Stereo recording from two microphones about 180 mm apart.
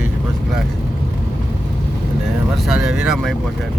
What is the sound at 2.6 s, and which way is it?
Speech, 5° right (ahead or behind).